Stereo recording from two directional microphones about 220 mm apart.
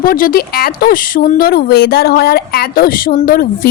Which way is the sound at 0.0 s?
40° left (ahead or behind).